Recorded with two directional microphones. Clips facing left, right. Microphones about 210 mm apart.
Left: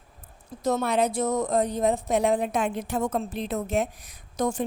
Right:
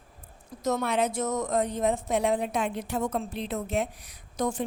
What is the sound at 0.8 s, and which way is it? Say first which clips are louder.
A woman's voice: left 4 dB; 40° left (ahead or behind).